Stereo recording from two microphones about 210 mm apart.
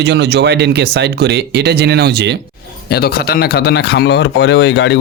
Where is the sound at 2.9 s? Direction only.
50° left (ahead or behind).